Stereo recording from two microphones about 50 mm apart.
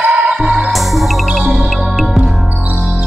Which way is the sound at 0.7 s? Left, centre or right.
Centre.